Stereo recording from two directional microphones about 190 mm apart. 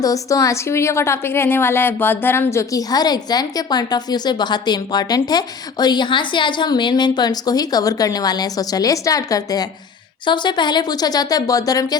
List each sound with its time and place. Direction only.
0.0 s a woman's voice: 15° left (ahead or behind)